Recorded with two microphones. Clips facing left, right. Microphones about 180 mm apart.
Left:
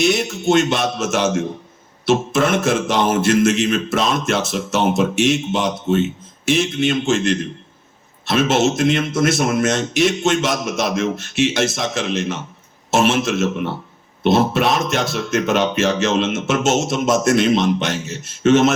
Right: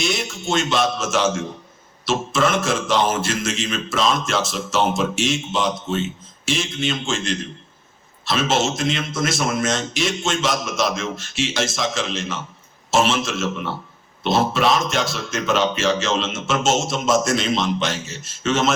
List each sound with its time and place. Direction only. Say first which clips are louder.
0.0 s speech: left 7 dB; 60° left (ahead or behind)